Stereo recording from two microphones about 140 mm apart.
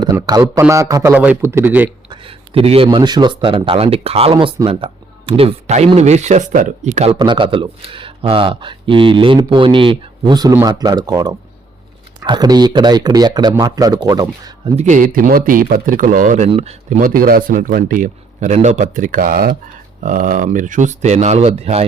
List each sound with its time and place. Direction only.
0.0 s speech: 30° right (ahead or behind)
1.1 s a man's voice: 10° right (ahead or behind)
2.0 s speech: 40° right (ahead or behind)
7.2 s speech: 35° right (ahead or behind)
14.8 s a man's voice: 60° right (ahead or behind)
16.5 s speech: 50° right (ahead or behind)
17.0 s a man's voice: 90° right
20.0 s speech: 70° right (ahead or behind); by 21.8 s 45° right (ahead or behind)